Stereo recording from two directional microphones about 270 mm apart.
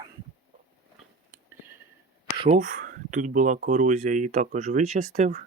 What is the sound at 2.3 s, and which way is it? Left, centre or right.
Speech, right.